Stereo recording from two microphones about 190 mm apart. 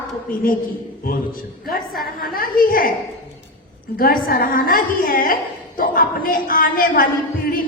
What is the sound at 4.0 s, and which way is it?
A woman's voice, 50° left (ahead or behind).